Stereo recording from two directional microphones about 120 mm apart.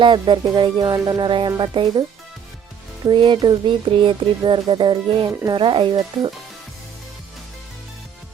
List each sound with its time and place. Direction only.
0.0 s speech: 40° right (ahead or behind)
3.1 s speech: 40° right (ahead or behind)